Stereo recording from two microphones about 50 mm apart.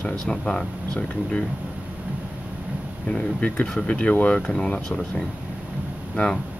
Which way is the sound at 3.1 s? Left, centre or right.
Left.